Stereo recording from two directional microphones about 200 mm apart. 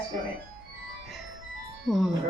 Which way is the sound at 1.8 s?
Centre (ahead or behind).